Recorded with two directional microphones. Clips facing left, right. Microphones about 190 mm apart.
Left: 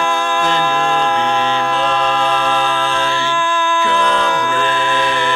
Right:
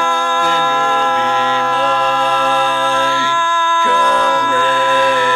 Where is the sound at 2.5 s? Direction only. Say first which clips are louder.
Right 1 dB; 10° right (ahead or behind).